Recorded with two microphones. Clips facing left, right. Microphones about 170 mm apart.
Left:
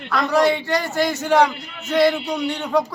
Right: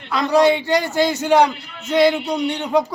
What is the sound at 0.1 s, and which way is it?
A man's voice, 15° right (ahead or behind).